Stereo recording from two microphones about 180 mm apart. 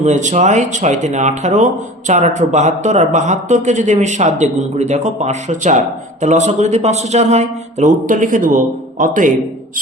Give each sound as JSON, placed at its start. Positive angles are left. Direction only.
{"t": 0.0, "sound": "speech", "side_deg": -40}